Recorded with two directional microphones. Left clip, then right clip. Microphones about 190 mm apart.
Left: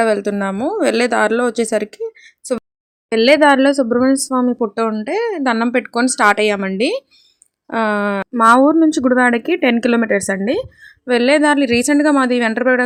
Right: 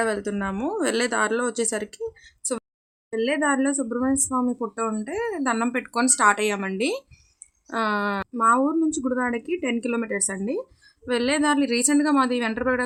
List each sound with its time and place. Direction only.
0.0 s speech: 30° left (ahead or behind)